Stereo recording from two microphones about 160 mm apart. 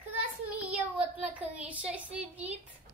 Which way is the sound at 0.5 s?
10° right (ahead or behind).